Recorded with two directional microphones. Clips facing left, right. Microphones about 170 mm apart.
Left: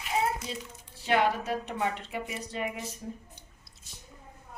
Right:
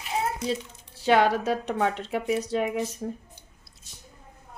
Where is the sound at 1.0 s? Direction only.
90° right.